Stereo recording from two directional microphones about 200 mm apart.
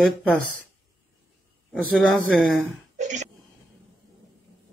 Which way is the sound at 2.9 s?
35° right (ahead or behind).